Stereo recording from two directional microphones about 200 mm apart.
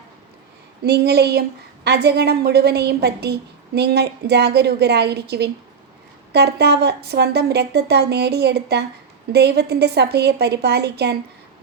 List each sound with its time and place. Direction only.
0.9 s a woman's voice: 55° right (ahead or behind)